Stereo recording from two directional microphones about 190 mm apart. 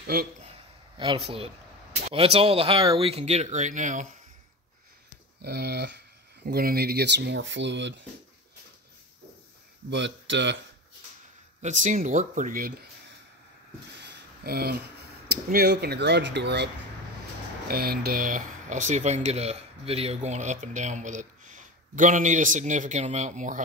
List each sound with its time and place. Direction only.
0.0 s speech: 50° right (ahead or behind)
0.4 s a sound: 30° right (ahead or behind)
2.1 s speech: 30° right (ahead or behind)
5.4 s speech: 55° right (ahead or behind)
9.8 s speech: 70° right (ahead or behind)
11.6 s speech: 40° right (ahead or behind)
14.0 s a sound: 55° right (ahead or behind)
15.2 s speech: 60° right (ahead or behind)
17.6 s speech: 55° right (ahead or behind)